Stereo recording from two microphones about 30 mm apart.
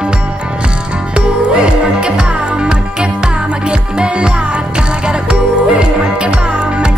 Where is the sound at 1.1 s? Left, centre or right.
Right.